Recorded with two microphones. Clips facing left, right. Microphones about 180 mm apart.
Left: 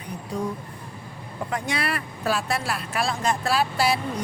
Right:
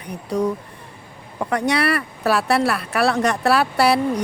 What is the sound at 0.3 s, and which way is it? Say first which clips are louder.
Speech: right 8 dB; 70° right (ahead or behind).